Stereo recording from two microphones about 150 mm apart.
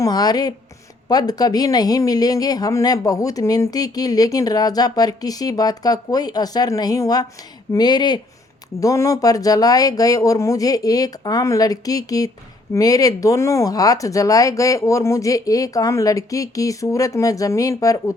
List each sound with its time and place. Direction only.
0.0 s speech: 25° left (ahead or behind)